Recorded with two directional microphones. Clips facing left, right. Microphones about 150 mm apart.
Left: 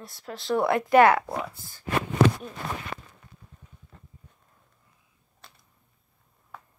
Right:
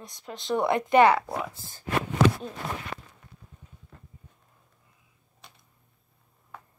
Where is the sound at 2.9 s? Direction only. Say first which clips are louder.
Left 1 dB; centre (ahead or behind).